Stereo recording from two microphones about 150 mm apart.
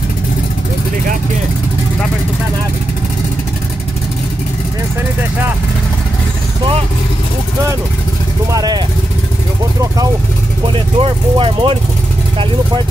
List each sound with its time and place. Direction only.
8.5 s speech: 25° right (ahead or behind)
11.0 s speech: 35° right (ahead or behind)